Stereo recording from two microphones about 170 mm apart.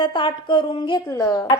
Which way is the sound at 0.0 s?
25° left (ahead or behind).